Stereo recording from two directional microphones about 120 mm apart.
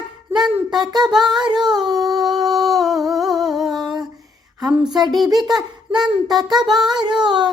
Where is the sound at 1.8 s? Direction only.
30° right (ahead or behind).